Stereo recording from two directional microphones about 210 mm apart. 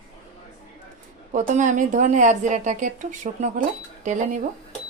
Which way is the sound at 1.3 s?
35° right (ahead or behind).